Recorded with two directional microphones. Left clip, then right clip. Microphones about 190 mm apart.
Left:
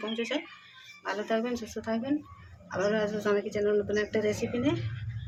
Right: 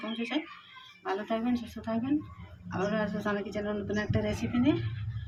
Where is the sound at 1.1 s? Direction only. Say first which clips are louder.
Left 1 dB; 65° left (ahead or behind).